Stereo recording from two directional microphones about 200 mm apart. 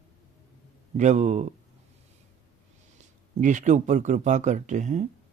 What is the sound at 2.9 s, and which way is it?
Speech, 40° right (ahead or behind).